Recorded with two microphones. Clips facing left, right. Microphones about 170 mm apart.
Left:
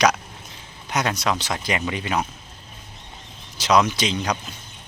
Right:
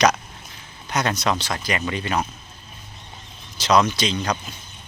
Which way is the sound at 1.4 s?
20° left (ahead or behind).